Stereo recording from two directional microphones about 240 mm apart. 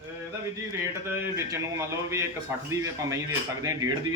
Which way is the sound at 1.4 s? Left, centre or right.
Centre.